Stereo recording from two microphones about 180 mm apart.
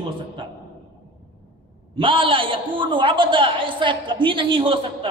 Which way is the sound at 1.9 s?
30° right (ahead or behind).